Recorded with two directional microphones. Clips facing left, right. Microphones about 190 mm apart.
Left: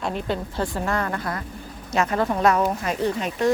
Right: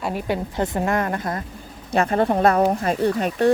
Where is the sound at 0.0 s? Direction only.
10° right (ahead or behind).